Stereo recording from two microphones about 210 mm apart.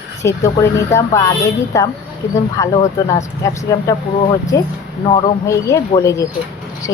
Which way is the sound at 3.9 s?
15° left (ahead or behind).